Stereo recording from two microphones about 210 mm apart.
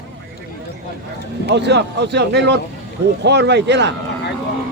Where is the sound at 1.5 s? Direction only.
55° right (ahead or behind).